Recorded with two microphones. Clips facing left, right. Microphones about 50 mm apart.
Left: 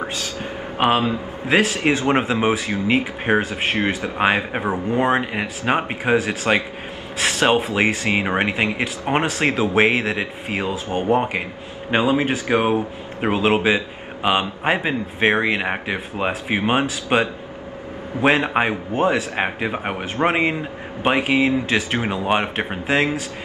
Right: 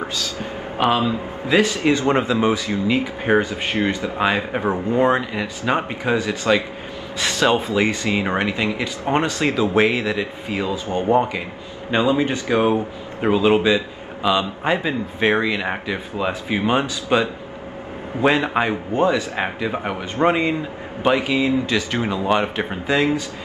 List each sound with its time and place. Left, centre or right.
0.7 s a man's voice: left
3.3 s speech: centre
3.9 s a man's voice: left
4.6 s speech: centre
5.1 s a man's voice: left
11.9 s speech: centre
12.4 s a man's voice: left
19.3 s a man's voice: left